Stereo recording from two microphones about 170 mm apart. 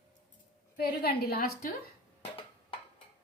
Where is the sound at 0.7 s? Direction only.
65° left (ahead or behind).